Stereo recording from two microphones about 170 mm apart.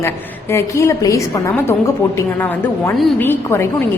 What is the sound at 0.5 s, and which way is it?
A woman's voice, 15° left (ahead or behind).